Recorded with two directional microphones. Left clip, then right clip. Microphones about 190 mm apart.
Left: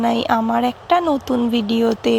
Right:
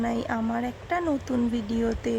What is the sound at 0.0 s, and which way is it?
Speech, 15° left (ahead or behind).